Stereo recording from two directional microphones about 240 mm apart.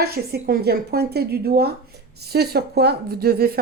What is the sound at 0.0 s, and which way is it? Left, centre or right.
Speech, right.